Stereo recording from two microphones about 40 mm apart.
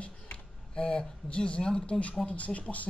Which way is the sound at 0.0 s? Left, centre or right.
Left.